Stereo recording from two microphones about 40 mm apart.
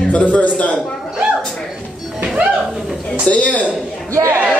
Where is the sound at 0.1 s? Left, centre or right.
Left.